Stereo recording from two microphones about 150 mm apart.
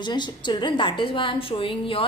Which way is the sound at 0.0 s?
30° left (ahead or behind).